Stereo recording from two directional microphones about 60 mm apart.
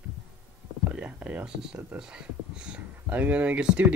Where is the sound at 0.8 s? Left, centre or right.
Right.